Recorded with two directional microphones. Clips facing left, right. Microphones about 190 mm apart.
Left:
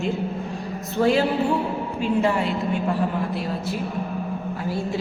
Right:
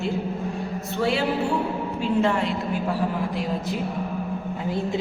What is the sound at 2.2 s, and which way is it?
Speech, 10° left (ahead or behind).